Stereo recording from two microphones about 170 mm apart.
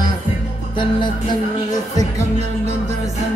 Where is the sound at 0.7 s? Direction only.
30° left (ahead or behind).